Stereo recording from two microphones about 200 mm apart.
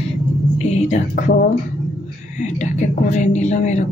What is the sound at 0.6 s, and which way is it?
A woman's voice, 35° left (ahead or behind).